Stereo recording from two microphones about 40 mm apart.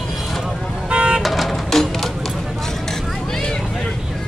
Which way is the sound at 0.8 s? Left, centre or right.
Right.